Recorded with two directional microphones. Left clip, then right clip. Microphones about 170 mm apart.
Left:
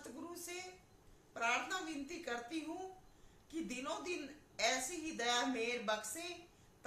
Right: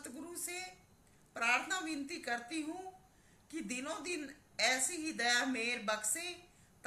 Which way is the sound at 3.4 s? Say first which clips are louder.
Right 1 dB; 15° left (ahead or behind).